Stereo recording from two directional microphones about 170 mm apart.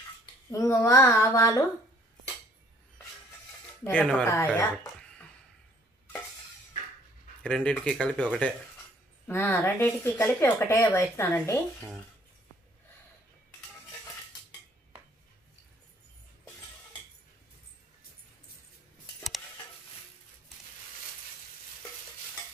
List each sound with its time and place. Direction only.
0.5 s speech: 15° left (ahead or behind)
3.8 s speech: 5° left (ahead or behind)
7.4 s speech: 5° left (ahead or behind)